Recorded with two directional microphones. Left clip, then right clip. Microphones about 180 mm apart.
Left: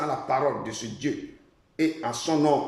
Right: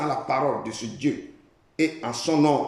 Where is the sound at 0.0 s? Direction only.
5° right (ahead or behind).